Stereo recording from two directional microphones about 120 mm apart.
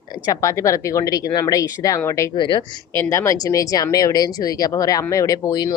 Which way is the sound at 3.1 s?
25° left (ahead or behind).